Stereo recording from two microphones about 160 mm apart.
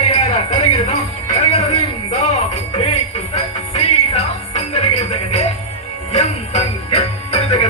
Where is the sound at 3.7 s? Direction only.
40° left (ahead or behind).